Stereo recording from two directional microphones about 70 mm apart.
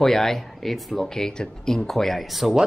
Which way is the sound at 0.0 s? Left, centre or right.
Centre.